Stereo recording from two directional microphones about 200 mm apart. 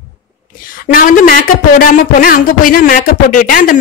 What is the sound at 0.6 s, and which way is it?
A woman's voice, 45° left (ahead or behind).